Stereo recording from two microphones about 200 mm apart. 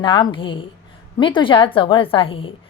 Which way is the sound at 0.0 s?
25° left (ahead or behind).